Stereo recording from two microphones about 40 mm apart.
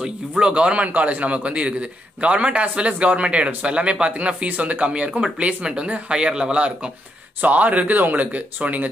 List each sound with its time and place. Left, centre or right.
0.0 s speech: right
0.8 s a man's voice: right
7.4 s a man's voice: right